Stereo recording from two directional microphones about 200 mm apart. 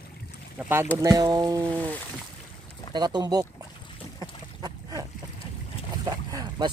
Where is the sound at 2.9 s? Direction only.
20° right (ahead or behind).